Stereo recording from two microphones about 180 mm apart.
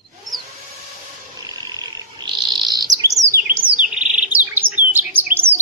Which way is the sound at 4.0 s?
5° right (ahead or behind).